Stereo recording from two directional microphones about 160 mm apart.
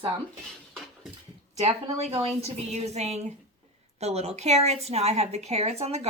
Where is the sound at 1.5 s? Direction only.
40° right (ahead or behind).